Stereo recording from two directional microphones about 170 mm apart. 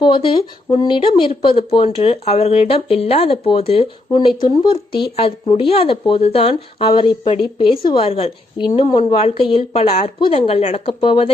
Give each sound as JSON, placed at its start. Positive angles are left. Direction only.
{"t": 0.0, "sound": "speech", "side_deg": 30}